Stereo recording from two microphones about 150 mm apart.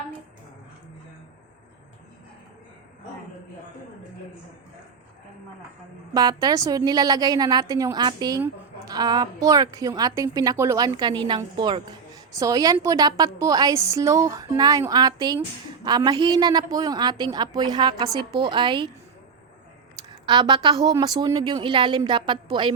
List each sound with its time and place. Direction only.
6.1 s a woman's voice: 25° right (ahead or behind)
20.2 s a woman's voice: 30° right (ahead or behind)